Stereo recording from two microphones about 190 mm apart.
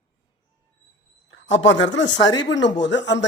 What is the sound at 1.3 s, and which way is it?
A woman's voice, 80° left.